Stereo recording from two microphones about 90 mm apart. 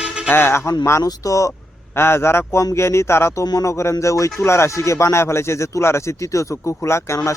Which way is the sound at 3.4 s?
40° left (ahead or behind).